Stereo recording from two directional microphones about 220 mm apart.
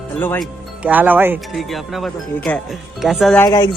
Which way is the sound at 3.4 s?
15° left (ahead or behind).